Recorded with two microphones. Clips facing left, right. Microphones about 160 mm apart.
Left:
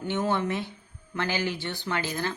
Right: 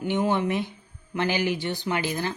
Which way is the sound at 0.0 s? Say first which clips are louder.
Right 3 dB; 15° right (ahead or behind).